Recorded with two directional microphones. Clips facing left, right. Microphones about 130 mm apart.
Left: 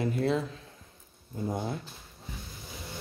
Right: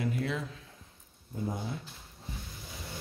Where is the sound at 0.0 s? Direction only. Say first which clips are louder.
Left 5 dB; 30° left (ahead or behind).